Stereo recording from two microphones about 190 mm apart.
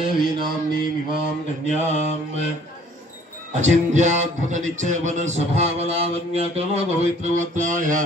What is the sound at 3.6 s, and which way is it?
Mantra, 40° right (ahead or behind).